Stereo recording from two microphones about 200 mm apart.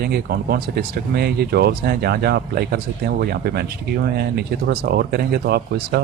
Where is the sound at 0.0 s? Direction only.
50° right (ahead or behind).